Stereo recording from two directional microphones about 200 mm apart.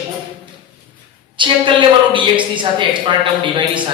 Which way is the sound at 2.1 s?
25° right (ahead or behind).